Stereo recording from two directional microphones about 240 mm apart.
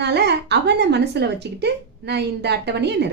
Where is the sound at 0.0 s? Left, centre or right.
Right.